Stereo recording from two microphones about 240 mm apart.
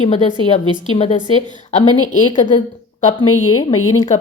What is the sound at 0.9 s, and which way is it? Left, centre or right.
Speech, left.